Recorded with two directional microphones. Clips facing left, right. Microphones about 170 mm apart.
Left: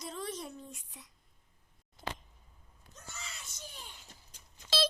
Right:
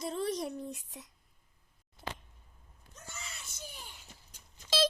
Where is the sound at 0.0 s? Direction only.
30° right (ahead or behind).